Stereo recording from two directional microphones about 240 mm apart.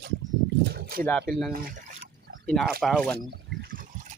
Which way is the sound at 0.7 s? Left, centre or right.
Right.